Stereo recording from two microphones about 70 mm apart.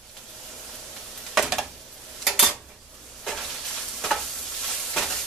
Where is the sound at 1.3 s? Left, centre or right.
Centre.